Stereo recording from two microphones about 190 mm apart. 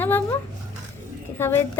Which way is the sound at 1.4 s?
10° left (ahead or behind).